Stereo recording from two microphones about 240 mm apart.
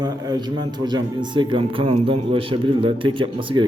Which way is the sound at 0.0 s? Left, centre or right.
Centre.